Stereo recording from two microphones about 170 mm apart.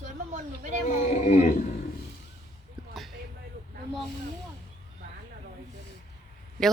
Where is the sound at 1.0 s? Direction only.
45° left (ahead or behind).